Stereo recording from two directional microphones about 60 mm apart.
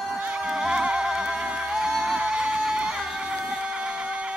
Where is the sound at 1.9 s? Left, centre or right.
Centre.